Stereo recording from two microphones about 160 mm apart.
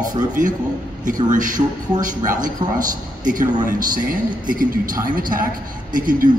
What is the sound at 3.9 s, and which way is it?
A woman's voice, 60° right (ahead or behind).